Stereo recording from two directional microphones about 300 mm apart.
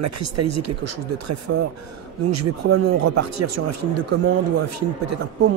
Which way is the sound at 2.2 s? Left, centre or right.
Right.